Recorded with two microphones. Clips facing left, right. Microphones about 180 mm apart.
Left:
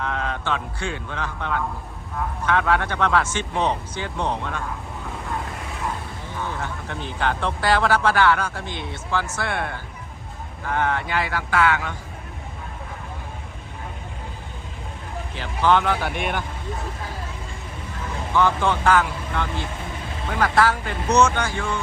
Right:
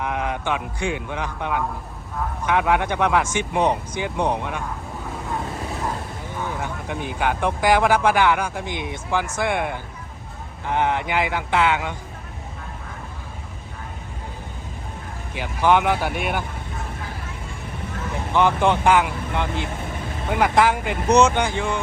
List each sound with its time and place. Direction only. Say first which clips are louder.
0.0 s a man's voice: right 2 dB; 15° right (ahead or behind)
6.4 s speech: right 1 dB; 15° right (ahead or behind)
15.4 s speech: right 1 dB; 15° right (ahead or behind)
18.3 s speech: right 2 dB; 15° right (ahead or behind)